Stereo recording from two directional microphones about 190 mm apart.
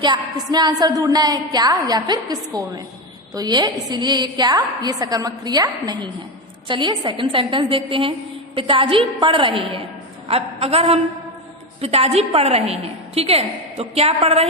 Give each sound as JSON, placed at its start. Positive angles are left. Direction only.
{"t": 0.0, "sound": "a woman's voice", "side_deg": -20}